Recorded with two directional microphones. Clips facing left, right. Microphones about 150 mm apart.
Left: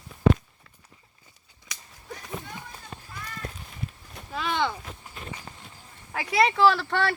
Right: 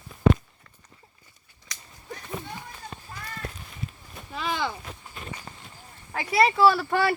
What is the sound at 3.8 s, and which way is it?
Livestock, 55° left (ahead or behind).